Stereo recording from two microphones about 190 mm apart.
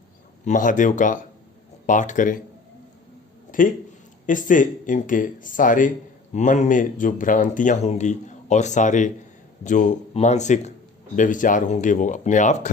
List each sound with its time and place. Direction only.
0.4 s speech: 40° left (ahead or behind)
4.3 s speech: 45° left (ahead or behind)